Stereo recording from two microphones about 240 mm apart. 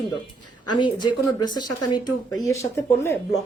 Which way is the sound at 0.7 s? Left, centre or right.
Centre.